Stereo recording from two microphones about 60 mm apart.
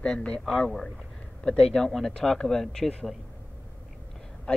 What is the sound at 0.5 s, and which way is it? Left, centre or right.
Speech, centre.